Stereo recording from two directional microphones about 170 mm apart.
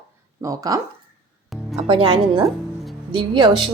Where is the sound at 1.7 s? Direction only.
35° right (ahead or behind).